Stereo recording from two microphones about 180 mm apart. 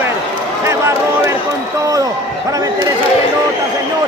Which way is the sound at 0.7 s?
15° right (ahead or behind).